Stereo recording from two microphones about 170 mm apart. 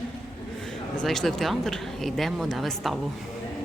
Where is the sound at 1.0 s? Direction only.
Centre (ahead or behind).